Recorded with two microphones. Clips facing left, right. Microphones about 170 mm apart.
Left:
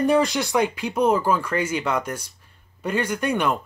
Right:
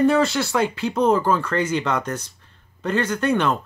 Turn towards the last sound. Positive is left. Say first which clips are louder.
# right 2 dB
turn(degrees=10)  # may be behind; listen again after turning